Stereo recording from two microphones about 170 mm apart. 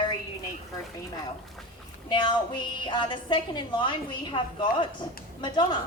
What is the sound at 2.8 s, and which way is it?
A woman's voice, 30° left (ahead or behind).